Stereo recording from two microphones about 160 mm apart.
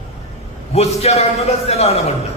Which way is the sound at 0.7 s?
40° left (ahead or behind).